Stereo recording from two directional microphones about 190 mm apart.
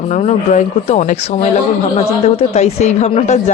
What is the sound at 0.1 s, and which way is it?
Speech, 40° left (ahead or behind).